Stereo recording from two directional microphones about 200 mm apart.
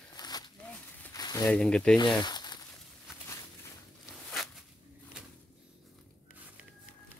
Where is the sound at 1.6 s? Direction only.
5° left (ahead or behind).